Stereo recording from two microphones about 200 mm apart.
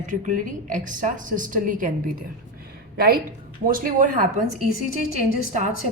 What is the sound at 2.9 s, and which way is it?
A woman's voice, 45° right (ahead or behind).